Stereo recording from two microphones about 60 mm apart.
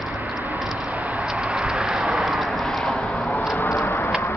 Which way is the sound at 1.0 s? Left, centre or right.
Right.